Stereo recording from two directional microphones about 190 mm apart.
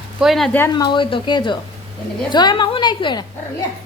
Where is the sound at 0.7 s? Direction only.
25° left (ahead or behind).